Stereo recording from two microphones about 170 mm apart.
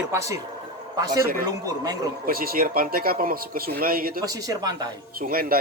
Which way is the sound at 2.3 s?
60° right (ahead or behind).